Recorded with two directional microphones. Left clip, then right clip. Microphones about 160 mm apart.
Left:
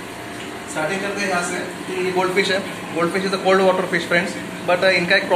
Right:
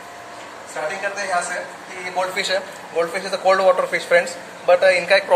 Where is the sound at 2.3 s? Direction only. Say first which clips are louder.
Left 3 dB; 65° right (ahead or behind).